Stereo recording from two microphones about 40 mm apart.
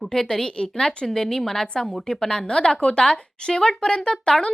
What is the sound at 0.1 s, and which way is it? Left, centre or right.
A woman's voice, centre.